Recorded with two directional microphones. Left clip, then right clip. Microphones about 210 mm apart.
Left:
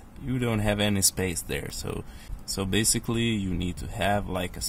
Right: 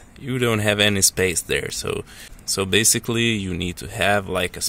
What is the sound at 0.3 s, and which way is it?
Speech, 20° right (ahead or behind).